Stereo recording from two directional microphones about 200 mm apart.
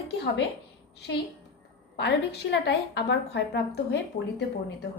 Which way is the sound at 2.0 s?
60° left (ahead or behind).